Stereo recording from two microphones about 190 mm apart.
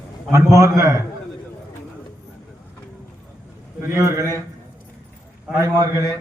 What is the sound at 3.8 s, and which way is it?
Speech, 15° right (ahead or behind).